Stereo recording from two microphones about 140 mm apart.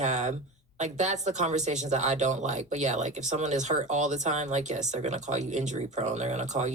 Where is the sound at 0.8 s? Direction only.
55° right (ahead or behind).